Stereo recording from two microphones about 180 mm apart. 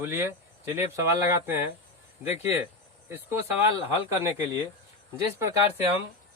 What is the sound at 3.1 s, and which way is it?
Speech, 15° right (ahead or behind).